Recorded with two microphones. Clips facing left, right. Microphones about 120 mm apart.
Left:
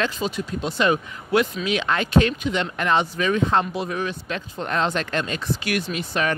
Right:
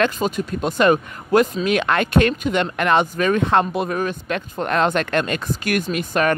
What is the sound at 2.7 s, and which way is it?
Speech, 60° right (ahead or behind).